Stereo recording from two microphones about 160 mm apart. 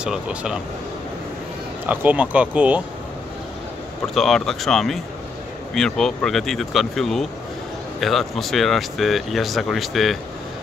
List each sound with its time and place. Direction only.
0.0 s speech: 5° right (ahead or behind)
1.9 s speech: 10° right (ahead or behind)
4.1 s speech: centre (ahead or behind)